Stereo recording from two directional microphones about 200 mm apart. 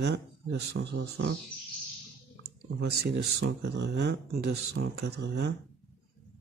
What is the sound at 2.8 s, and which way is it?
Speech, 55° right (ahead or behind).